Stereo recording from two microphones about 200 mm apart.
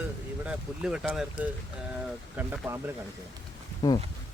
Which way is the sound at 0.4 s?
5° right (ahead or behind).